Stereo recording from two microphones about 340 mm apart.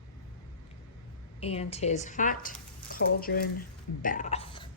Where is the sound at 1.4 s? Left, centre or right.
Centre.